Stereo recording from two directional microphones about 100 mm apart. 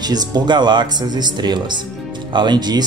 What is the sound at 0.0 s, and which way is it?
Speech, 45° right (ahead or behind).